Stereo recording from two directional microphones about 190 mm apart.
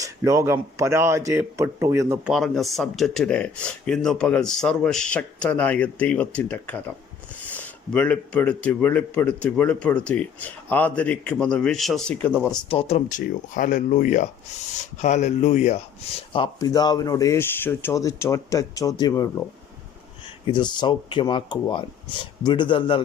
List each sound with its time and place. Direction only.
0.0 s a man's voice: 15° right (ahead or behind)
2.3 s speech: centre (ahead or behind)
12.5 s speech: 30° left (ahead or behind)
13.1 s speech: 45° left (ahead or behind)
16.3 s speech: 25° left (ahead or behind)
20.5 s speech: 25° left (ahead or behind)